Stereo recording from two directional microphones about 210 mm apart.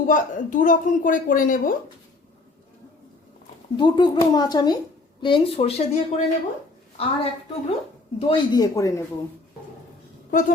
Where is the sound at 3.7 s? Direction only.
20° left (ahead or behind).